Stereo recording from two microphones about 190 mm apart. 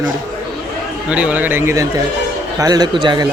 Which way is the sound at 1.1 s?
5° right (ahead or behind).